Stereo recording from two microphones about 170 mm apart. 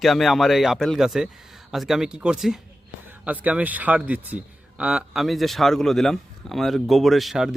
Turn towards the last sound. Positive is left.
turn(degrees=0)  # may be behind; listen again after turning